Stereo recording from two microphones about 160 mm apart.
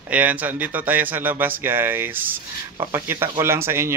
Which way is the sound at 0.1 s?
10° right (ahead or behind).